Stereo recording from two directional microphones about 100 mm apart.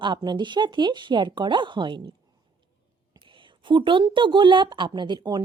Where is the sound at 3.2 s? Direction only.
55° right (ahead or behind).